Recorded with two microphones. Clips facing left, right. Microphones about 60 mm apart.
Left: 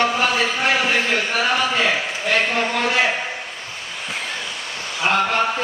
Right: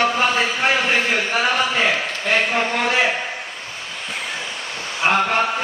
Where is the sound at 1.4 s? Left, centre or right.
Centre.